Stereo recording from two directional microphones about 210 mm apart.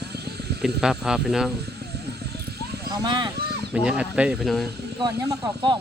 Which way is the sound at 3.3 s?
50° right (ahead or behind).